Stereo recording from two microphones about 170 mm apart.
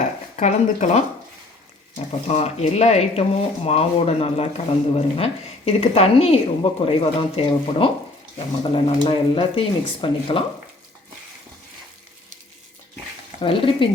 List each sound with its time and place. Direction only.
0.3 s speech: 45° left (ahead or behind)
2.2 s speech: 40° left (ahead or behind)
13.4 s speech: 30° left (ahead or behind)